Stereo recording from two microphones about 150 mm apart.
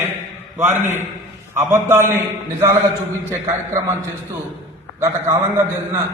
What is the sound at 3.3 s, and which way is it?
Speech, 20° right (ahead or behind).